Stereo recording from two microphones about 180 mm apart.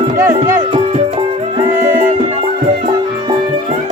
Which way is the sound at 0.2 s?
15° right (ahead or behind).